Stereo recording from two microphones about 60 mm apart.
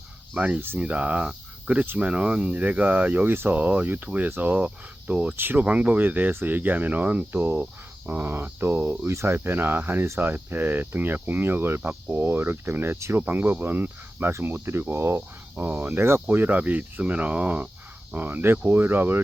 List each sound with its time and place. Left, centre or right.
0.3 s speech: right
1.3 s cricket: centre
1.8 s speech: right
3.5 s speech: right
5.4 s speech: right
5.6 s speech: right
7.4 s speech: right
12.1 s speech: right
13.2 s speech: right
16.3 s speech: right